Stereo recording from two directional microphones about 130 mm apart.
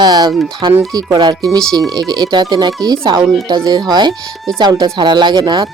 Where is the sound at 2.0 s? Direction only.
30° right (ahead or behind).